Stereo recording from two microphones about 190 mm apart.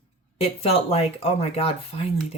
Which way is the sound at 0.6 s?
35° left (ahead or behind).